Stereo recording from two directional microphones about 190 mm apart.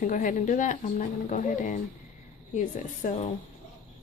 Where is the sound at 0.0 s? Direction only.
45° left (ahead or behind).